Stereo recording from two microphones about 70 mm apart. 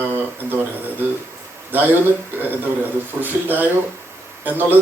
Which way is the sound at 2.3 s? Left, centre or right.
Right.